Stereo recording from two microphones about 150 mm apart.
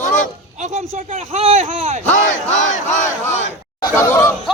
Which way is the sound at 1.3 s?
45° right (ahead or behind).